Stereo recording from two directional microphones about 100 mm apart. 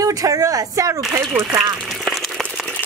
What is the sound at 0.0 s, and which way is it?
Speech, 35° right (ahead or behind).